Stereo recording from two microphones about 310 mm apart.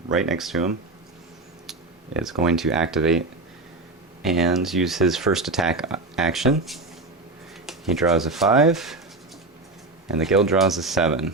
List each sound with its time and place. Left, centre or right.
0.1 s speech: centre
2.2 s speech: centre
4.2 s speech: centre
10.2 s speech: centre